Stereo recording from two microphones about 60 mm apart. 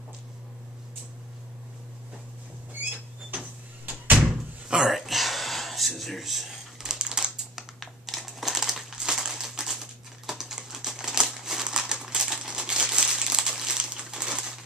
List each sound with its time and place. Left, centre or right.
3.8 s door: right
4.2 s slam: centre
4.9 s a sound: centre
10.2 s typing: centre